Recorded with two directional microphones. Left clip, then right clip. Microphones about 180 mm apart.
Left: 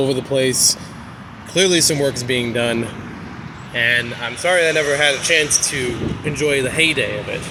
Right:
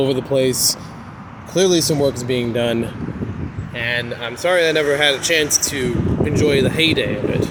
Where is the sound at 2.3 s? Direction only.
15° right (ahead or behind).